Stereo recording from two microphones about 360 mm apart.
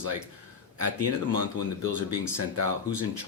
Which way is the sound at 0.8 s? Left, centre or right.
Right.